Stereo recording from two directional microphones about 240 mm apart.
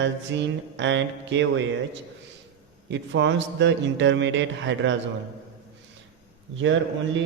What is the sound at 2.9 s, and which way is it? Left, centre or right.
Speech, right.